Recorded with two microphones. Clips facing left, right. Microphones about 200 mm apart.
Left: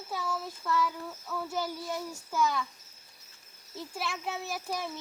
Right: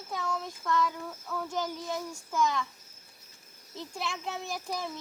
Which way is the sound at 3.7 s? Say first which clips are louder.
Even; 5° left (ahead or behind).